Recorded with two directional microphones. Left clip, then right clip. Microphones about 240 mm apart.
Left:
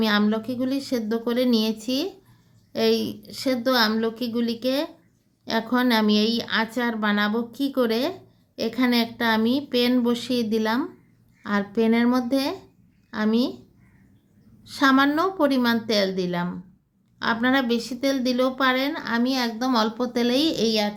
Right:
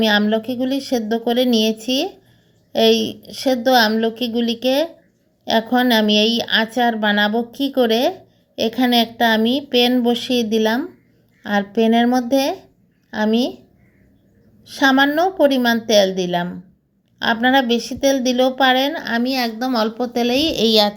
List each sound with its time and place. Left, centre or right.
0.0 s a woman's voice: centre
14.6 s speech: centre